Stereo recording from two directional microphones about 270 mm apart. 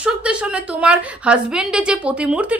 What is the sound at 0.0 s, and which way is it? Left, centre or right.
A woman's voice, centre.